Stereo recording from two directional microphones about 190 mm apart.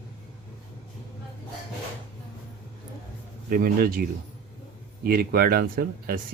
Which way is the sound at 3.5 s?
50° right (ahead or behind).